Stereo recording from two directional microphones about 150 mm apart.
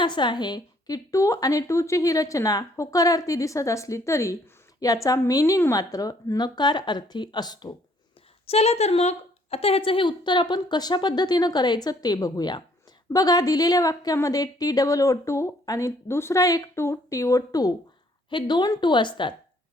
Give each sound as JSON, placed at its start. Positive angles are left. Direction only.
{"t": 0.0, "sound": "a woman's voice", "side_deg": 30}
{"t": 8.4, "sound": "a woman's voice", "side_deg": 45}